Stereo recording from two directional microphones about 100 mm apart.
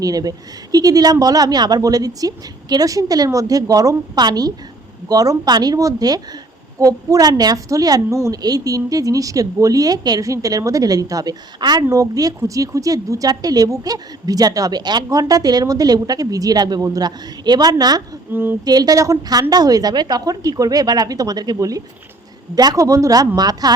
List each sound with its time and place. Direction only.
0.0 s a woman's voice: 40° right (ahead or behind)
18.3 s speech: 20° right (ahead or behind)
18.6 s a woman's voice: 40° right (ahead or behind)